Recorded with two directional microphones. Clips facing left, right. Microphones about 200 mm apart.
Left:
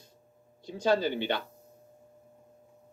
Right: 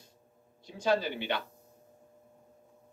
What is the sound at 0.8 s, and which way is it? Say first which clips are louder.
Speech: left 3 dB; 30° left (ahead or behind).